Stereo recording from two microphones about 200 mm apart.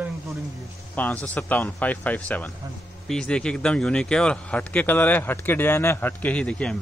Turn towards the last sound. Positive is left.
turn(degrees=5)  # may be behind; listen again after turning